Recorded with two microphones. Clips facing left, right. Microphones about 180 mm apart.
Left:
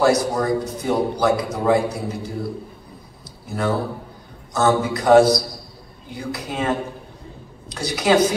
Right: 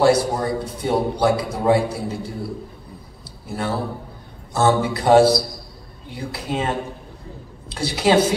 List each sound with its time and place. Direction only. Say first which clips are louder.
0.0 s a man's voice: right 1 dB; 30° right (ahead or behind)
3.4 s a man's voice: left 2 dB; 30° right (ahead or behind)
7.7 s a man's voice: right 1 dB; 30° right (ahead or behind)